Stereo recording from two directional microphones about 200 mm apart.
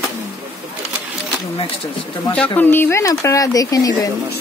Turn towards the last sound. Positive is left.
turn(degrees=15)  # may be behind; listen again after turning